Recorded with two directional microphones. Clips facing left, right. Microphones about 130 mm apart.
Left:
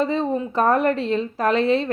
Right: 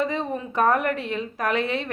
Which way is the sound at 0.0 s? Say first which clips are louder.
Left 5 dB; 30° left (ahead or behind).